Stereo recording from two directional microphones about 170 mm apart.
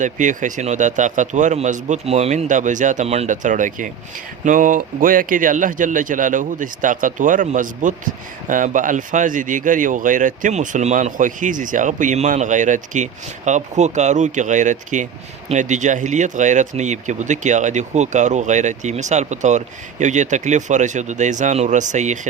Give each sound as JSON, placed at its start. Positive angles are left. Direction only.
{"t": 0.0, "sound": "speech", "side_deg": -45}